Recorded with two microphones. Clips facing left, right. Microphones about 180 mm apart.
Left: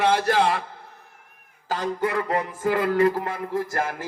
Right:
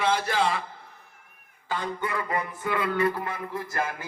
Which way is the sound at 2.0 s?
80° left.